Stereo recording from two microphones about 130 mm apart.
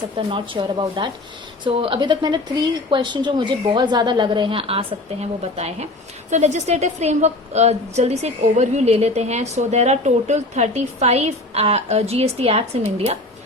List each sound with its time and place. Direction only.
0.2 s a woman's voice: 40° right (ahead or behind)